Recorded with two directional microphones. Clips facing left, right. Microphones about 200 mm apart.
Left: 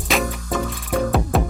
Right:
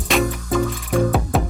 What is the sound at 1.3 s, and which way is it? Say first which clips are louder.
Music: even; centre (ahead or behind).